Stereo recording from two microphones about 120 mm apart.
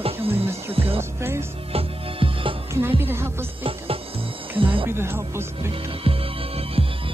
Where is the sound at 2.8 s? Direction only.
20° right (ahead or behind).